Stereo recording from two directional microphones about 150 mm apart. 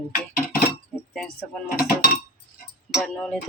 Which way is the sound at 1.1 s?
5° left (ahead or behind).